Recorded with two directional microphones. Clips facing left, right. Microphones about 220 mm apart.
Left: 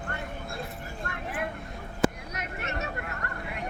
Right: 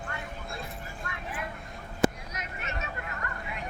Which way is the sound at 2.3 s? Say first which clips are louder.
Left 3 dB; 60° left (ahead or behind).